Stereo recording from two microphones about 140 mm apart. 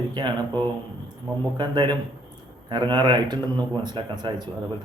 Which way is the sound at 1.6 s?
35° right (ahead or behind).